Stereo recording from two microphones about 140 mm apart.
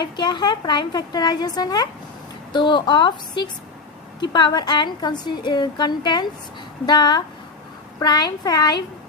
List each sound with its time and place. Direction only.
0.0 s a woman's voice: 30° left (ahead or behind)